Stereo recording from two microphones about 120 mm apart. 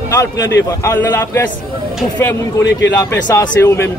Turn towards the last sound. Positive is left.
turn(degrees=20)  # may be behind; listen again after turning